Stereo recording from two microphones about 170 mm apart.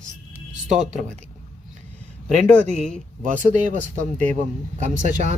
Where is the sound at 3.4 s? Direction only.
50° right (ahead or behind).